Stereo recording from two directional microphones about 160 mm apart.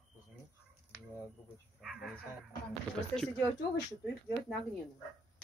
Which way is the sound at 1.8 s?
Centre (ahead or behind).